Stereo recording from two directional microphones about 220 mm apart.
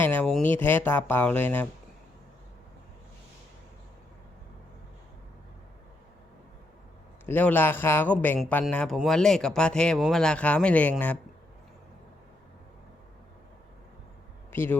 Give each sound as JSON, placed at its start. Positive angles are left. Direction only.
{"t": 0.0, "sound": "speech", "side_deg": 10}
{"t": 7.3, "sound": "speech", "side_deg": 10}
{"t": 14.5, "sound": "speech", "side_deg": 10}